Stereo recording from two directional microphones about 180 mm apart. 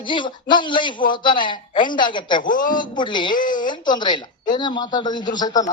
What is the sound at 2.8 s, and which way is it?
Speech, 25° left (ahead or behind).